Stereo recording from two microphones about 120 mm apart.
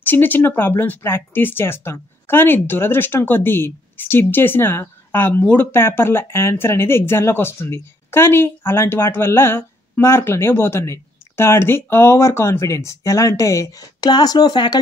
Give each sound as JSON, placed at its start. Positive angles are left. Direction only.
{"t": 0.0, "sound": "speech", "side_deg": 15}